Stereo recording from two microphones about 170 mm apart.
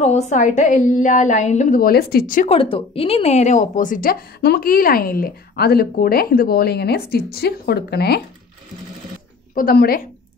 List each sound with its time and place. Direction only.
0.0 s a woman's voice: 45° left (ahead or behind); by 2.4 s 60° left (ahead or behind)
2.4 s a woman's voice: 35° left (ahead or behind); by 8.2 s 70° left (ahead or behind)
9.6 s a woman's voice: 65° left (ahead or behind)